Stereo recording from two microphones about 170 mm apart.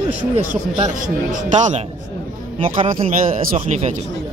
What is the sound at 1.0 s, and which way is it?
Speech, 45° right (ahead or behind).